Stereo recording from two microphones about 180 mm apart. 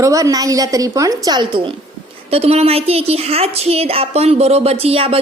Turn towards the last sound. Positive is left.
turn(degrees=-30)  # may be behind; listen again after turning